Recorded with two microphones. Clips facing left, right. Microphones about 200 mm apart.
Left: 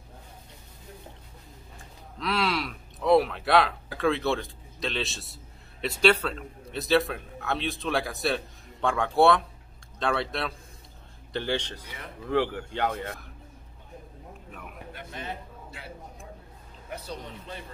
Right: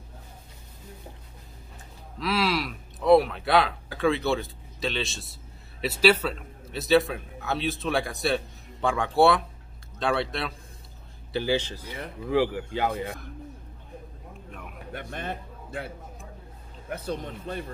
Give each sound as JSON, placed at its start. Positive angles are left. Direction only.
{"t": 2.1, "sound": "speech", "side_deg": -5}
{"t": 14.9, "sound": "a man's voice", "side_deg": -55}
{"t": 16.9, "sound": "speech", "side_deg": -50}